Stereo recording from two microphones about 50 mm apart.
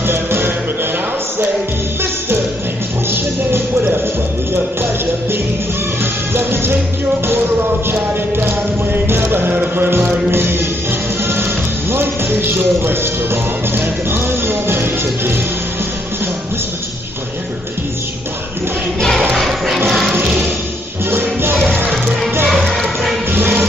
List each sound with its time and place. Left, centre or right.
0.0 s music: right
3.1 s music: right
6.3 s music: right
7.9 s music: right
18.9 s choir: centre
19.4 s music: centre
21.1 s music: right
21.6 s music: right
23.3 s music: right